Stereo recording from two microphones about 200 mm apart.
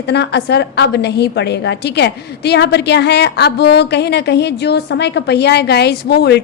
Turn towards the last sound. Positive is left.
turn(degrees=55)  # may be behind; listen again after turning